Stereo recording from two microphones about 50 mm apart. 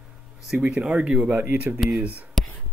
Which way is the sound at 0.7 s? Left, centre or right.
Centre.